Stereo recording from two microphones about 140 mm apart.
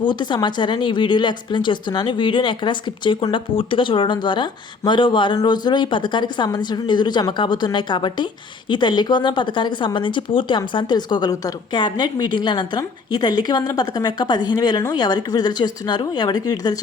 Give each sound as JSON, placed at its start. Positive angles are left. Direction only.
{"t": 0.0, "sound": "speech", "side_deg": 35}